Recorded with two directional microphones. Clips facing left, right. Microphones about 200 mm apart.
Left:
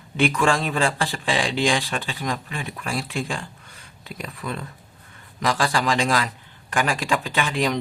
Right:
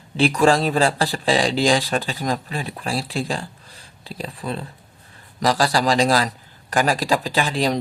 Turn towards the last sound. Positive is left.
turn(degrees=-35)  # may be behind; listen again after turning